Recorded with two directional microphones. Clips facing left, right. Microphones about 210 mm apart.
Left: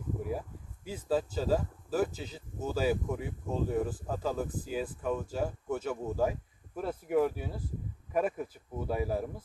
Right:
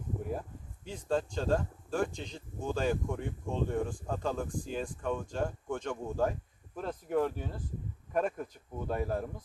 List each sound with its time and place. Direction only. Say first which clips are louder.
0.3 s speech: left 1 dB; 5° left (ahead or behind)